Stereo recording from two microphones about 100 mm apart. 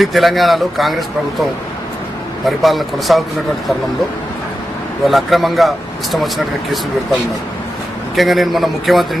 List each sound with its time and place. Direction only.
0.0 s speech: centre (ahead or behind)
2.6 s speech: centre (ahead or behind)
5.0 s speech: centre (ahead or behind)
8.1 s speech: centre (ahead or behind)